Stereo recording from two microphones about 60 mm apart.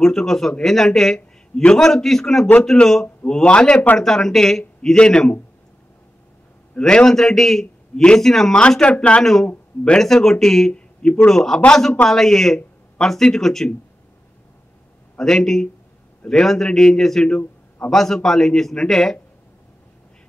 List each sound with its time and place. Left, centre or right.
0.0 s a man's voice: centre
4.0 s a man's voice: centre
6.8 s a man's voice: centre
8.5 s speech: centre
9.2 s a man's voice: centre
10.7 s a sound: centre
11.2 s a man's voice: centre
11.5 s speech: centre
12.1 s speech: centre
15.1 s a man's voice: centre